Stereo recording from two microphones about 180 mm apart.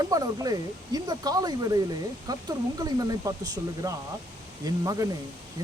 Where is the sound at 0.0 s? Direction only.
20° right (ahead or behind).